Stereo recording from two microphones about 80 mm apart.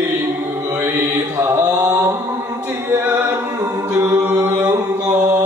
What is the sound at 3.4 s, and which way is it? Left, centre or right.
Music, right.